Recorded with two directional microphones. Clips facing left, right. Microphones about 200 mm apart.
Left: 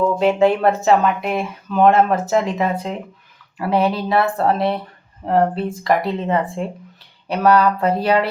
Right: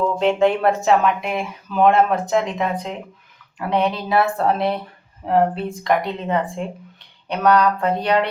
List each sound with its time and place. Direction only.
0.2 s speech: 5° left (ahead or behind)